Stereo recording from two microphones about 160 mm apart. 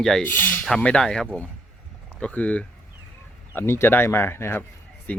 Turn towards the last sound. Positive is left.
turn(degrees=10)  # may be behind; listen again after turning